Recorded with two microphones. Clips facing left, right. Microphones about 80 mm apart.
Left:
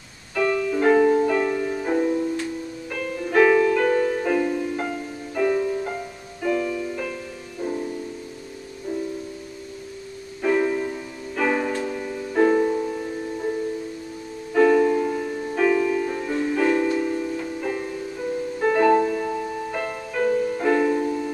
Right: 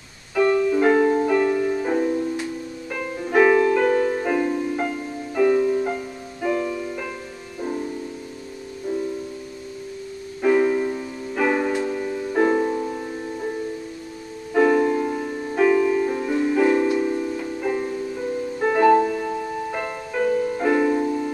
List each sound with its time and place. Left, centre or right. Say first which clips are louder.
0.7 s music: even; centre
10.4 s music: right 3 dB; centre
14.5 s music: left 1 dB; centre
16.3 s music: right 2 dB; centre